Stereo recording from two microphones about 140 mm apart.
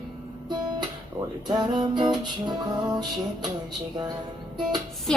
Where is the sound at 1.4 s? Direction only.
30° right (ahead or behind).